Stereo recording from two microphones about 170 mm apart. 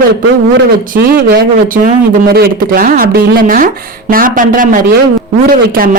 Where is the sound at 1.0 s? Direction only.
60° right (ahead or behind).